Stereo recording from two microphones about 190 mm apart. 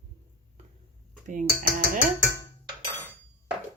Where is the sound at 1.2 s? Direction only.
45° right (ahead or behind).